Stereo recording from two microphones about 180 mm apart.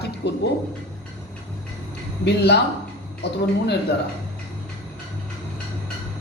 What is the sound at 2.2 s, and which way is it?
A woman's voice, 65° left (ahead or behind).